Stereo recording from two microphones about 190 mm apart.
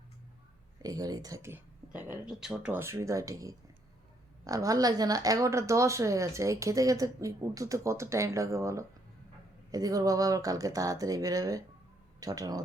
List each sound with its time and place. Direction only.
0.8 s speech: 20° right (ahead or behind)